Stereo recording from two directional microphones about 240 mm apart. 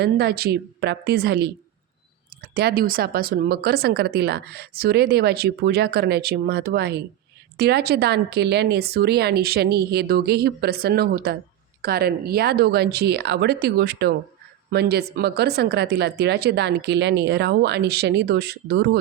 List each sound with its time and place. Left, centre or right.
0.0 s speech: right